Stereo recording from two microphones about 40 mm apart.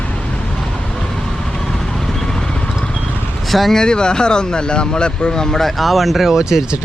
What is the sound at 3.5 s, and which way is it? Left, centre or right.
Speech, centre.